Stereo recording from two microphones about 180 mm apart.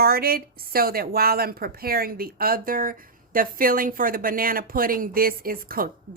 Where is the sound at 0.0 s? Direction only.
55° right (ahead or behind).